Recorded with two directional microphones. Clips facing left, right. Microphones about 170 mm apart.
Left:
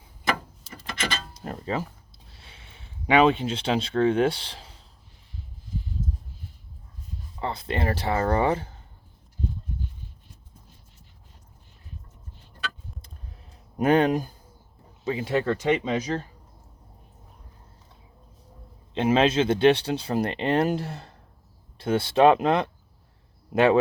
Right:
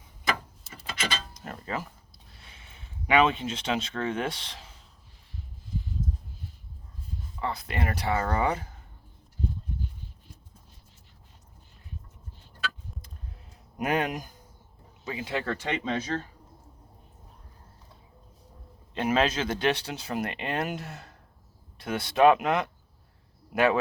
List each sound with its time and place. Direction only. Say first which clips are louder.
1.3 s a sound: left 5 dB; 30° left (ahead or behind)
2.3 s speech: left 2 dB; 30° left (ahead or behind)
7.3 s speech: left 3 dB; 30° left (ahead or behind)
13.7 s speech: left 8 dB; 30° left (ahead or behind)
15.4 s speech: left 6 dB; 10° left (ahead or behind)
18.9 s speech: left 5 dB; 25° left (ahead or behind)